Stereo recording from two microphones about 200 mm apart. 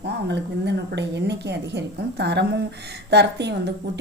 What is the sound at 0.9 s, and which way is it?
A woman's voice, 60° right (ahead or behind).